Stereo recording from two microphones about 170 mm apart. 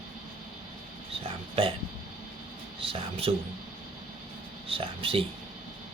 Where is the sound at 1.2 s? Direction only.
30° right (ahead or behind).